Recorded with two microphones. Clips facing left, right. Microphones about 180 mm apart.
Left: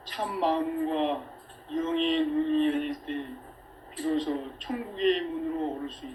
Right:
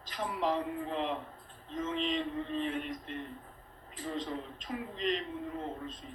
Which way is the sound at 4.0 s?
50° left (ahead or behind).